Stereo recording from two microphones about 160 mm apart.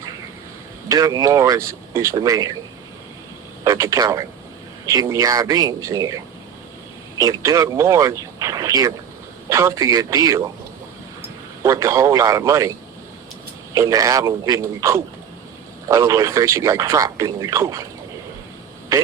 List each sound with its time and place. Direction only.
0.9 s speech: 25° right (ahead or behind)
3.6 s speech: 20° right (ahead or behind)
7.2 s a man's voice: 20° right (ahead or behind)
13.7 s speech: 20° right (ahead or behind)